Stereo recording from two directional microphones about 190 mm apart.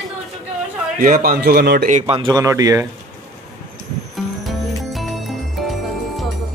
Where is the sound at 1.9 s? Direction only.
40° right (ahead or behind).